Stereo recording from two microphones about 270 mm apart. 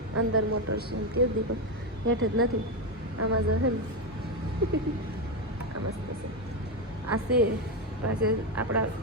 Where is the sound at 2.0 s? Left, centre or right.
Right.